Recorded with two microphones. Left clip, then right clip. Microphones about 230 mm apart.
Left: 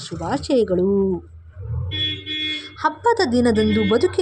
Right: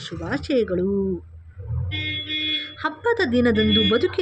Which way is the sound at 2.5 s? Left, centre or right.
Centre.